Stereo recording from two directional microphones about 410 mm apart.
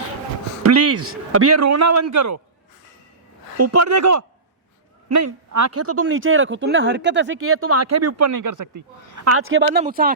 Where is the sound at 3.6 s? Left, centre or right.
Right.